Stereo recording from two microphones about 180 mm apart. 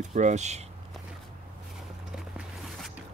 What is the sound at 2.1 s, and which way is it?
Music, centre (ahead or behind).